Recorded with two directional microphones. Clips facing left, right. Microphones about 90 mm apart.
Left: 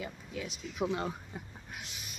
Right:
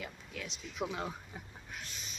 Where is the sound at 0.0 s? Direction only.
5° left (ahead or behind).